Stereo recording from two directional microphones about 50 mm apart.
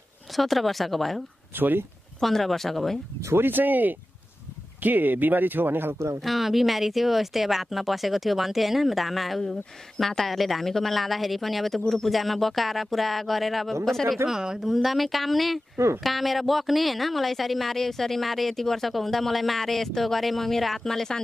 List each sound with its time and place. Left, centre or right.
0.4 s a woman's voice: centre
1.6 s speech: right
2.1 s a woman's voice: centre
3.3 s speech: right
6.2 s a woman's voice: centre